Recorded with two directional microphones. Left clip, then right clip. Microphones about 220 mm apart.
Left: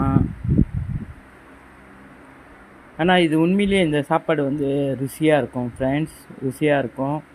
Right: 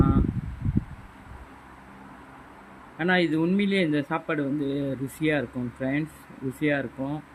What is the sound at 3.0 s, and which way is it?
Speech, 25° left (ahead or behind).